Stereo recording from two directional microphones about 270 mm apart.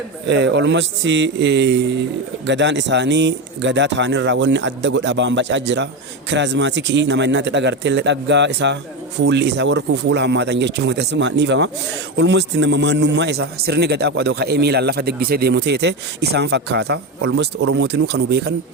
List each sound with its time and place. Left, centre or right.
0.3 s a man's voice: right